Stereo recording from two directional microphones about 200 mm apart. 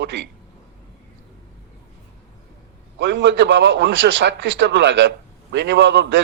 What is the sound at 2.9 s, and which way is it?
A man's voice, 65° right (ahead or behind).